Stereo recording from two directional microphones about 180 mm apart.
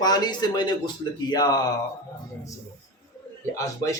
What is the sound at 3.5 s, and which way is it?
Speech, 15° left (ahead or behind).